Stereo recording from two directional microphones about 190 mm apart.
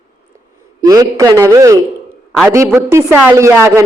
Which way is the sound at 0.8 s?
20° right (ahead or behind).